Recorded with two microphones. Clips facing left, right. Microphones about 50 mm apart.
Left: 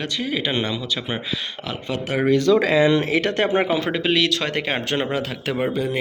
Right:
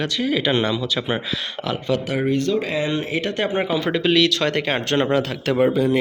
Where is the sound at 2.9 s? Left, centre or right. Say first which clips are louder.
Left 5 dB; left.